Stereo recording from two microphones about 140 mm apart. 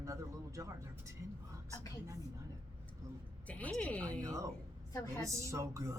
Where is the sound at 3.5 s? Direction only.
10° left (ahead or behind).